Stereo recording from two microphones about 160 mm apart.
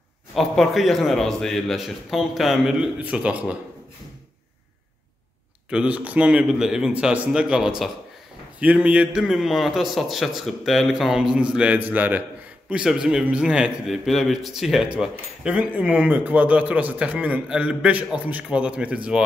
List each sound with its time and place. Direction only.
0.3 s a man's voice: centre (ahead or behind)
5.7 s a man's voice: 5° right (ahead or behind)